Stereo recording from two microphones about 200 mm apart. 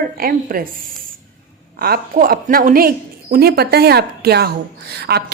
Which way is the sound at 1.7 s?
50° right (ahead or behind).